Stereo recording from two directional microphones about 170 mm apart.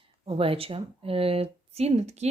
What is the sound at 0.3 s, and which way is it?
Speech, 35° right (ahead or behind).